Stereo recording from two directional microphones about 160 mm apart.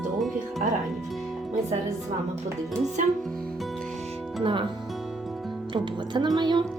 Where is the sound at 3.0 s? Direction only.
50° right (ahead or behind).